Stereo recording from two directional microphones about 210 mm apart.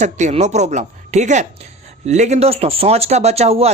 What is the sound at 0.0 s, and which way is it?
Speech, 35° right (ahead or behind).